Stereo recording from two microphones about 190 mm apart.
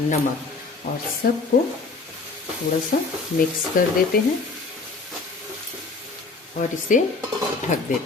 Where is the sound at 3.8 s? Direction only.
50° left (ahead or behind).